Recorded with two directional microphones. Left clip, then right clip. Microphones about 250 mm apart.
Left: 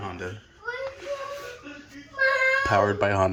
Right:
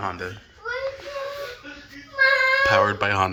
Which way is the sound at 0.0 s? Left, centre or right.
Centre.